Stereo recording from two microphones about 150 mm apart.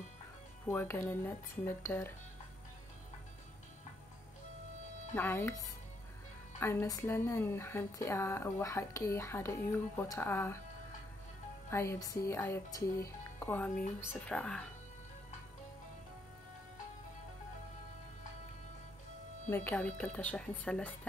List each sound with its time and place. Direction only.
0.7 s speech: 15° left (ahead or behind)
5.1 s speech: 15° left (ahead or behind)
11.7 s speech: 20° left (ahead or behind)
19.5 s speech: 10° left (ahead or behind)